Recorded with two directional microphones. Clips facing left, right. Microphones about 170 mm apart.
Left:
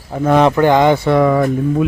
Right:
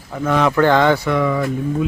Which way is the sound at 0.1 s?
35° left (ahead or behind).